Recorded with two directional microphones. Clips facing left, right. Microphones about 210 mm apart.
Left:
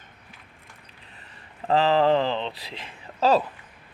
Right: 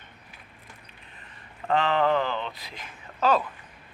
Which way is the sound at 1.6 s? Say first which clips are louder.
Left 4 dB; 35° left (ahead or behind).